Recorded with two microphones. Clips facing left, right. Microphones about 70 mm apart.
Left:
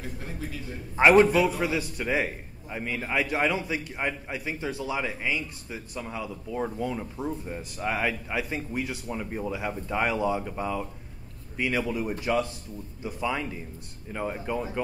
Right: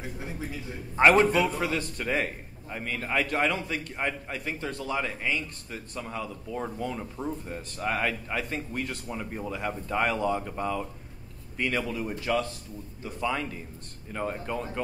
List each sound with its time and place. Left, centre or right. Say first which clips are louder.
0.9 s a man's voice: left 2 dB; centre